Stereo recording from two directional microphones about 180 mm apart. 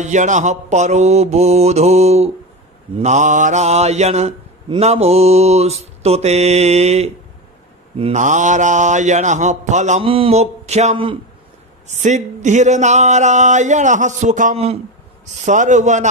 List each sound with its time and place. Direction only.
0.0 s mantra: 40° right (ahead or behind)